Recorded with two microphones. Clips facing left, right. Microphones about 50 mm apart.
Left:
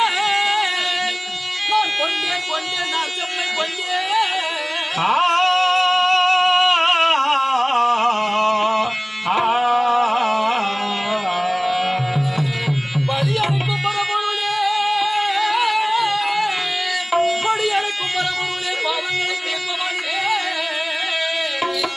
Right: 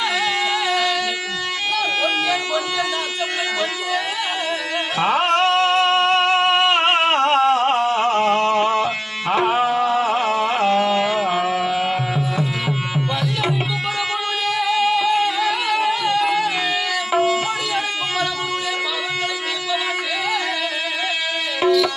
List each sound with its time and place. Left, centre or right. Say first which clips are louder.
0.0 s a sound: left 2 dB; centre
4.9 s music: left 1 dB; centre
9.9 s carnatic music: left 1 dB; centre
11.3 s carnatic music: even; centre
13.4 s music: left 1 dB; centre
17.4 s music: left 4 dB; centre